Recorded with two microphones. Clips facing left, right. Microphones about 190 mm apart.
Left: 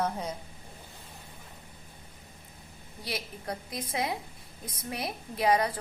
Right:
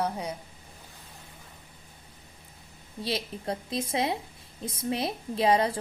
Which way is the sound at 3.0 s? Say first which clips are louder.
Right 5 dB; 25° right (ahead or behind).